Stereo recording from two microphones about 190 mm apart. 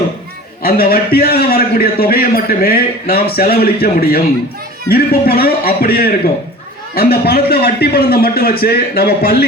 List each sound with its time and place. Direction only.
0.6 s a man's voice: 50° left (ahead or behind)